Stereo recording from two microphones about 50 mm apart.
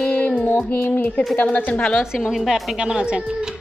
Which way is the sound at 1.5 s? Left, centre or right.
Left.